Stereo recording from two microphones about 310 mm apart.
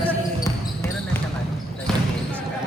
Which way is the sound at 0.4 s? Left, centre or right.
Centre.